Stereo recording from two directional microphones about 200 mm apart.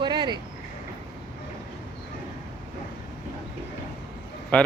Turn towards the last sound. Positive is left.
turn(degrees=5)  # may be behind; listen again after turning